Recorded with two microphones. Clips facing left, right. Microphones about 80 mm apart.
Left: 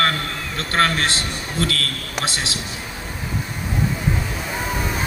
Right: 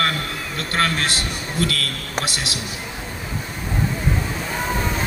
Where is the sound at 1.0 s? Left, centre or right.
Left.